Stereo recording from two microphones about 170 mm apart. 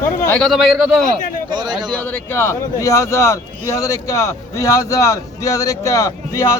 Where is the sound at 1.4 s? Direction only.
25° right (ahead or behind).